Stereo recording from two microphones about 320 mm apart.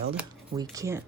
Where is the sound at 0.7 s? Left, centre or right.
Centre.